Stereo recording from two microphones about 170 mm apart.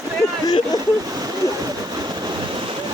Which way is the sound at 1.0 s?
20° right (ahead or behind).